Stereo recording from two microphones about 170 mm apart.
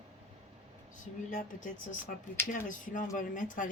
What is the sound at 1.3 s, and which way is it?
Speech, 50° left (ahead or behind).